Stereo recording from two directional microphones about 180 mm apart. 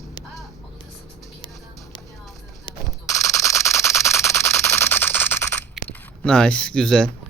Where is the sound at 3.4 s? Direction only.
15° left (ahead or behind).